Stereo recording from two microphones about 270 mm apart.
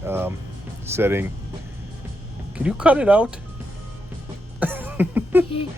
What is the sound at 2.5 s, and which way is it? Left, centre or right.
Speech, centre.